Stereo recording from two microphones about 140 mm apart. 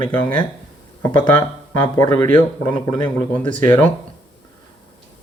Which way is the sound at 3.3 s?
35° left (ahead or behind).